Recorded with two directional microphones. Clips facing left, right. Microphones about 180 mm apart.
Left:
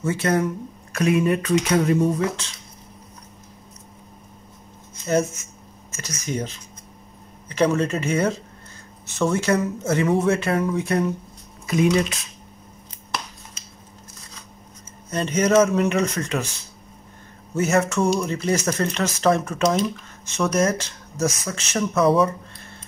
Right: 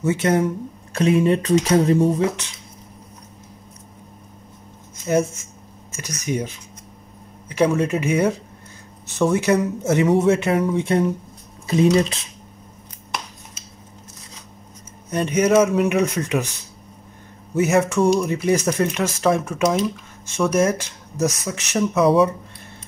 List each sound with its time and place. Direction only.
0.0 s speech: 20° right (ahead or behind)
5.9 s speech: 15° right (ahead or behind); by 12.2 s 30° right (ahead or behind)
15.0 s speech: 10° right (ahead or behind)
17.6 s speech: 15° right (ahead or behind)
22.0 s speech: centre (ahead or behind)